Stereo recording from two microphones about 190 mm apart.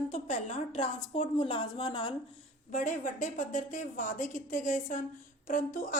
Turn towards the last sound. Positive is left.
turn(degrees=40)  # may be behind; listen again after turning